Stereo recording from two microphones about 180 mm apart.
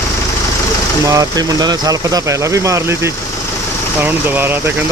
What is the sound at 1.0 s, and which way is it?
Speech, 20° right (ahead or behind).